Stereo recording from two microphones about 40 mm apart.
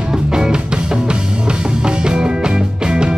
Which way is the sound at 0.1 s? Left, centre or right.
Centre.